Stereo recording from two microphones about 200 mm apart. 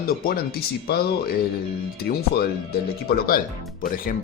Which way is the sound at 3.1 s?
50° left (ahead or behind).